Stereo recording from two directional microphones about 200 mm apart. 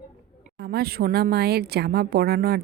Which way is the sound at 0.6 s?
50° right (ahead or behind).